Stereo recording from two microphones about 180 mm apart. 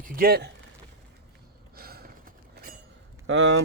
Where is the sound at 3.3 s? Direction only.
90° right.